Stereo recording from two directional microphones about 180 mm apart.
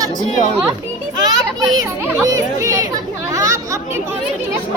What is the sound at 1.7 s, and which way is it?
Speech, 20° right (ahead or behind).